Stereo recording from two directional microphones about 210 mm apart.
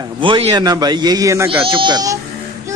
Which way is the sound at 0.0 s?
25° right (ahead or behind).